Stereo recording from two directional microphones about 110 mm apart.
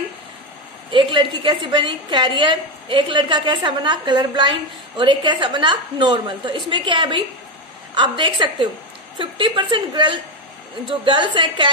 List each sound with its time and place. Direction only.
0.9 s a woman's voice: 45° right (ahead or behind)